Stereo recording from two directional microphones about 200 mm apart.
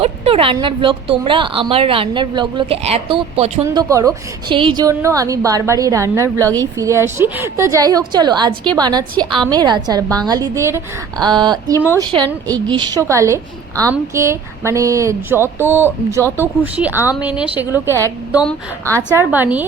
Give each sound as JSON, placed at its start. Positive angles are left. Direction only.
{"t": 0.0, "sound": "a woman's voice", "side_deg": -30}
{"t": 3.8, "sound": "a woman's voice", "side_deg": -15}
{"t": 19.1, "sound": "a woman's voice", "side_deg": -10}